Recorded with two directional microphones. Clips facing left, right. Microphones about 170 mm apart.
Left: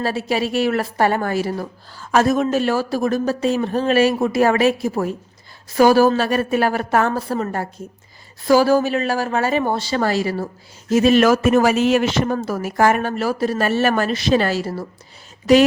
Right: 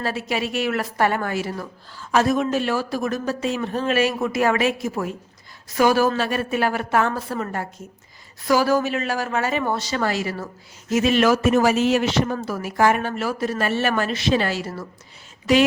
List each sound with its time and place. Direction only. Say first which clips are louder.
0.0 s a woman's voice: left 4 dB; 35° left (ahead or behind)